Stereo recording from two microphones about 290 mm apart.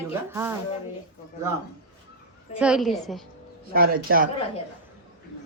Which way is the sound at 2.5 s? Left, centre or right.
Centre.